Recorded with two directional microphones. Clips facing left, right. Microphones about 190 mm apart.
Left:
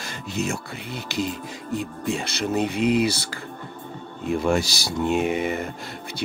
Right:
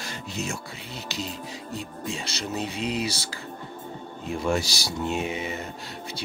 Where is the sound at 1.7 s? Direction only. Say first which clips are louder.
Left 8 dB; 55° left (ahead or behind).